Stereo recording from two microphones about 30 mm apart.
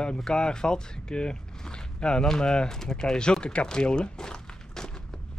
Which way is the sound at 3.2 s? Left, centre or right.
Left.